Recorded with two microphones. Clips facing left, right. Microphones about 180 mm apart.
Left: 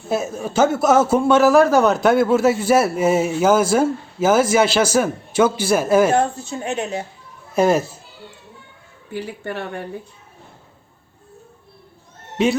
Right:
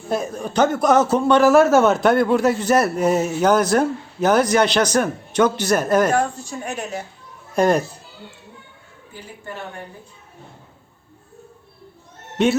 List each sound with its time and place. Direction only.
0.1 s a man's voice: 5° left (ahead or behind)
6.1 s a woman's voice: 25° left (ahead or behind)
7.5 s a man's voice: 5° left (ahead or behind)
9.1 s speech: 75° left (ahead or behind)
12.4 s a man's voice: centre (ahead or behind)